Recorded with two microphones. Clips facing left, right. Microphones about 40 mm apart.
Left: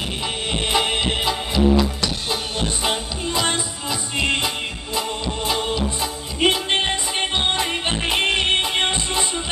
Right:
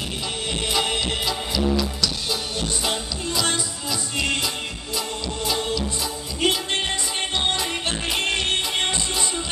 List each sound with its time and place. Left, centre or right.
0.5 s music: left
5.5 s music: left